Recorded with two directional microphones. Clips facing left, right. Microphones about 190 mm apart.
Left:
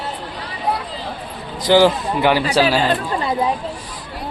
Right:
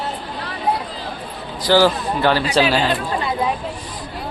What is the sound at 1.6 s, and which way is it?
A man's voice, 20° left (ahead or behind).